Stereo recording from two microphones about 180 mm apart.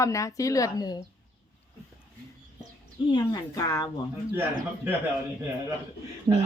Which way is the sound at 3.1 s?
20° left (ahead or behind).